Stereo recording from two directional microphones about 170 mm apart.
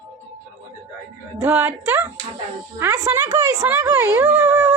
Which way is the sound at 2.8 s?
20° right (ahead or behind).